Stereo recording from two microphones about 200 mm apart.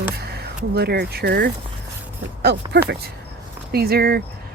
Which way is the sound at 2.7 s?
55° right (ahead or behind).